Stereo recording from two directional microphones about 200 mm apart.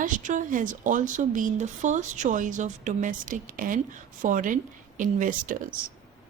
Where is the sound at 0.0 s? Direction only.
40° right (ahead or behind).